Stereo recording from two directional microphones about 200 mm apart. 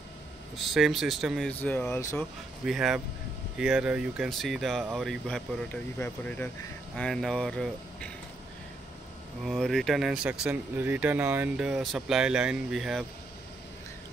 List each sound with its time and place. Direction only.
0.6 s speech: centre (ahead or behind)
2.6 s speech: centre (ahead or behind)
9.4 s speech: centre (ahead or behind)